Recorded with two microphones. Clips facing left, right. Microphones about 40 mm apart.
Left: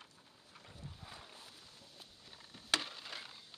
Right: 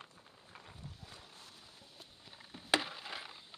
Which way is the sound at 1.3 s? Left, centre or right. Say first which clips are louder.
Even; centre.